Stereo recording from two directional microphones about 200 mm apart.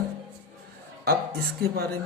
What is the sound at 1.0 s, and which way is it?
Speech, 50° right (ahead or behind).